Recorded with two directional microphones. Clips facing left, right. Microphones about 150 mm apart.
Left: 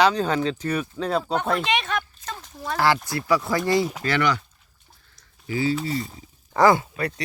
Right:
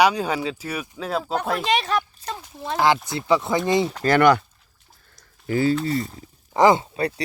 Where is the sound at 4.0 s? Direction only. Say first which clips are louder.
Right 7 dB; 50° right (ahead or behind).